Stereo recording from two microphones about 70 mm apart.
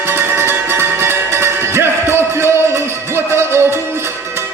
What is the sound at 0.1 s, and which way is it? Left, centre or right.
Music, right.